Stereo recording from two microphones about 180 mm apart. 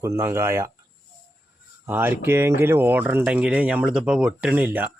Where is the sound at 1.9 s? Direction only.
10° right (ahead or behind).